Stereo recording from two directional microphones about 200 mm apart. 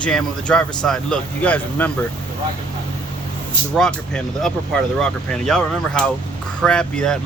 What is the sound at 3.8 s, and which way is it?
Speech, 5° left (ahead or behind).